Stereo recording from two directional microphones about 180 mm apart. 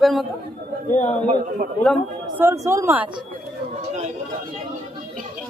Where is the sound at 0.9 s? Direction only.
40° left (ahead or behind).